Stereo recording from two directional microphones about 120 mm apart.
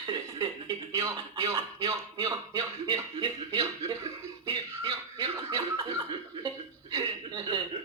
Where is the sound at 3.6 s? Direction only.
25° right (ahead or behind).